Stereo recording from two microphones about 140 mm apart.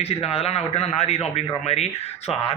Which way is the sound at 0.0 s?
45° left (ahead or behind).